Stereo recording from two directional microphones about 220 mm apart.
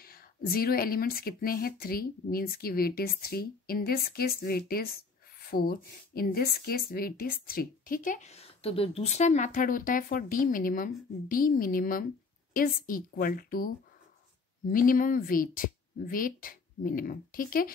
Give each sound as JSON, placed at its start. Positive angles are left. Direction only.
{"t": 0.0, "sound": "a woman's voice", "side_deg": 40}
{"t": 14.7, "sound": "a woman's voice", "side_deg": 40}